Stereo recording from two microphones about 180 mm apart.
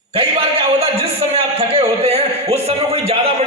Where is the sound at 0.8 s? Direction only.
35° right (ahead or behind).